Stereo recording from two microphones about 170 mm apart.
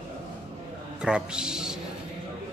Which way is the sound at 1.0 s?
5° right (ahead or behind).